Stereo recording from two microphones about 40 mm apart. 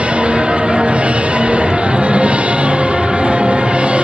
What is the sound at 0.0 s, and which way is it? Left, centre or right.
Music, right.